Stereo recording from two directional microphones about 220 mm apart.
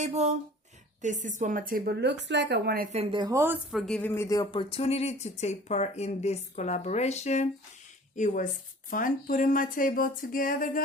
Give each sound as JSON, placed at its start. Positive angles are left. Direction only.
{"t": 0.0, "sound": "speech", "side_deg": -30}
{"t": 2.9, "sound": "speech", "side_deg": -25}